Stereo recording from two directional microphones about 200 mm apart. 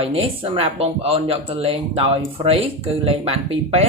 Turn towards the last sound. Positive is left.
turn(degrees=-30)  # may be behind; listen again after turning